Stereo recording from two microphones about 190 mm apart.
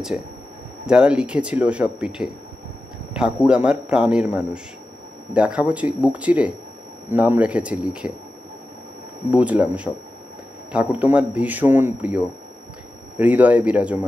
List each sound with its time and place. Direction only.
0.8 s a man's voice: 5° right (ahead or behind)
9.3 s a man's voice: 5° right (ahead or behind)
13.2 s a man's voice: 10° right (ahead or behind)